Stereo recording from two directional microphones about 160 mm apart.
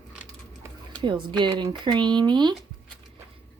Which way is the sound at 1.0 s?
30° right (ahead or behind).